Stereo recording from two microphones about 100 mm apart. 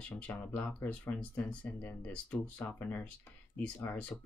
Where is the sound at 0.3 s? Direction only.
15° left (ahead or behind).